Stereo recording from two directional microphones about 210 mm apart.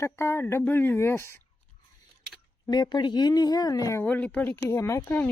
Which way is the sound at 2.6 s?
20° left (ahead or behind).